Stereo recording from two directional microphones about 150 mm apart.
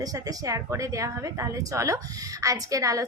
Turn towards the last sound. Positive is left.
turn(degrees=-20)  # may be behind; listen again after turning